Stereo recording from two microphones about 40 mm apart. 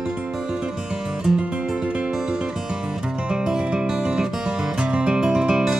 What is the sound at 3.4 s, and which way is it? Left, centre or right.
Music, centre.